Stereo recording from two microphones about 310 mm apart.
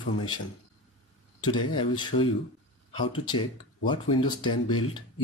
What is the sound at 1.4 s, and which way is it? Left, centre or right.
Speech, centre.